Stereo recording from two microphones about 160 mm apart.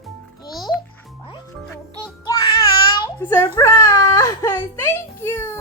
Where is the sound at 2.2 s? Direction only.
25° left (ahead or behind).